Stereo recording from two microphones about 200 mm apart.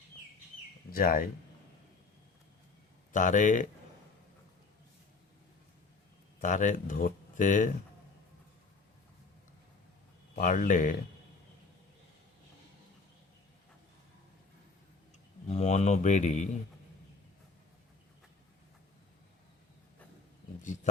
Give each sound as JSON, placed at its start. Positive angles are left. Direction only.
{"t": 0.9, "sound": "speech", "side_deg": 45}
{"t": 3.1, "sound": "speech", "side_deg": 40}
{"t": 6.4, "sound": "speech", "side_deg": 40}
{"t": 10.3, "sound": "speech", "side_deg": 40}
{"t": 15.4, "sound": "speech", "side_deg": 35}